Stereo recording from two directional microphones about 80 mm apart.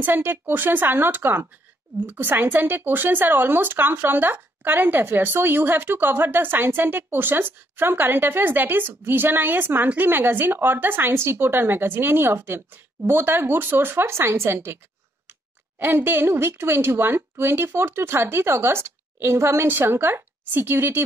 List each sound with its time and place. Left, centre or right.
0.0 s speech: right
15.8 s speech: right